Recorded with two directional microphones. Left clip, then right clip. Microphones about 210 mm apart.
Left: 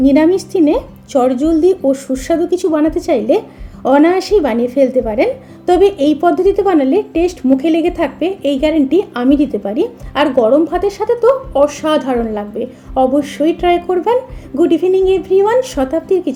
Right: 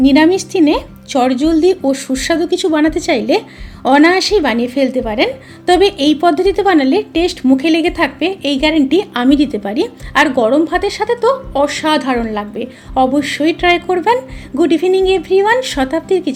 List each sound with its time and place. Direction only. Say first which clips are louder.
0.0 s a woman's voice: right 1 dB; 20° right (ahead or behind)